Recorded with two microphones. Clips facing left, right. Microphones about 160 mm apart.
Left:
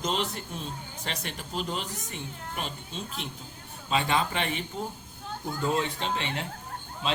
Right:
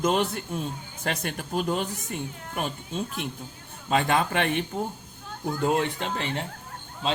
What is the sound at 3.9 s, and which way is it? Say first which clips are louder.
Speech: right 3 dB; 50° right (ahead or behind).